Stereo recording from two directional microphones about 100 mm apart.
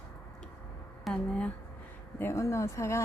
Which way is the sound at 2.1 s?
20° left (ahead or behind).